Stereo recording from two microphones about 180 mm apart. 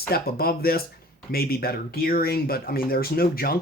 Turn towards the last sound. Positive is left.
turn(degrees=55)  # may be behind; listen again after turning